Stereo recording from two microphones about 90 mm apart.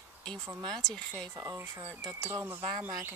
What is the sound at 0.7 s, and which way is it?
Speech, 5° left (ahead or behind).